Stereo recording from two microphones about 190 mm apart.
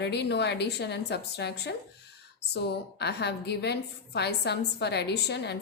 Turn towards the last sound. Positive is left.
turn(degrees=65)  # may be behind; listen again after turning